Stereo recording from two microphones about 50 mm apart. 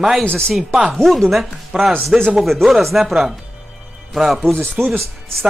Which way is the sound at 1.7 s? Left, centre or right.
Right.